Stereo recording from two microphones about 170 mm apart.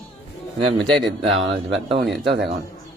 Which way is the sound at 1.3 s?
90° right.